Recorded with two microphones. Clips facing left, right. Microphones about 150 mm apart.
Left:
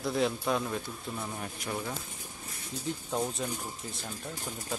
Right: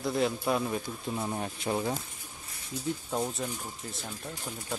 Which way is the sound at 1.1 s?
25° right (ahead or behind).